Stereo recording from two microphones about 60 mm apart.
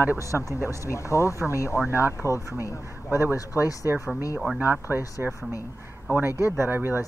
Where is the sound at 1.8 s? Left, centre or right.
Right.